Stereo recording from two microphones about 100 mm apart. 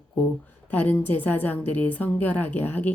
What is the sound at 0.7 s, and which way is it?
A woman's voice, 15° left (ahead or behind).